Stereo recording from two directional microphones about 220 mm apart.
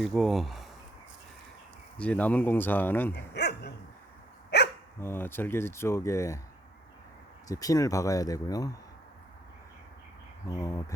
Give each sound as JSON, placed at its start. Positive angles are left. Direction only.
{"t": 0.0, "sound": "speech", "side_deg": 0}
{"t": 2.0, "sound": "speech", "side_deg": 5}
{"t": 3.3, "sound": "speech", "side_deg": 50}
{"t": 4.5, "sound": "dog", "side_deg": 50}
{"t": 4.9, "sound": "speech", "side_deg": 10}
{"t": 7.4, "sound": "speech", "side_deg": 15}
{"t": 10.5, "sound": "speech", "side_deg": 15}